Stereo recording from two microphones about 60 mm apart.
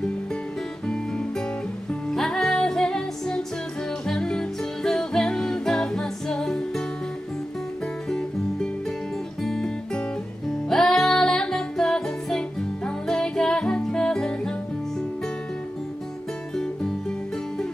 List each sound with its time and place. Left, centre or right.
0.8 s music: centre
8.1 s music: centre
10.7 s music: centre